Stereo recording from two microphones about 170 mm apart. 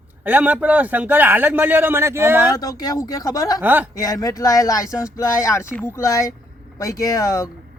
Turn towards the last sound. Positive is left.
turn(degrees=20)  # may be behind; listen again after turning